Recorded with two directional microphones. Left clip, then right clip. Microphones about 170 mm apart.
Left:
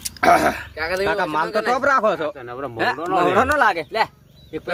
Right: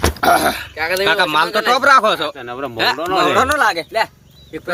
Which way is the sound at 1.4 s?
25° right (ahead or behind).